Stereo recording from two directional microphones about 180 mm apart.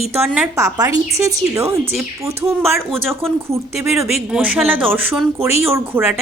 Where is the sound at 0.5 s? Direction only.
20° right (ahead or behind).